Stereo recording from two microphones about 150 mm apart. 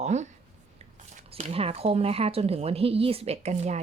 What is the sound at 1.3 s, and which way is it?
Speech, 45° right (ahead or behind).